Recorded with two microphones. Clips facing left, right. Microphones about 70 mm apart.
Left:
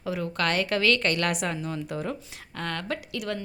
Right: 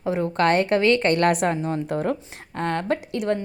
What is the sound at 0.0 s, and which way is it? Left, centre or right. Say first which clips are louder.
Speech: right 7 dB; right.